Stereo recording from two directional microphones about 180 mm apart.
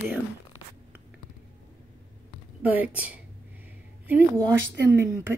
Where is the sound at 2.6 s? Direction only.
10° right (ahead or behind).